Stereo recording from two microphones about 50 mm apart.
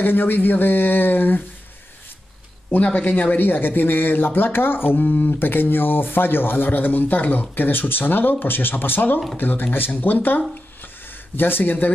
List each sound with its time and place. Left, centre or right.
0.0 s speech: left
2.7 s speech: left
5.4 s speech: left
10.8 s a sound: left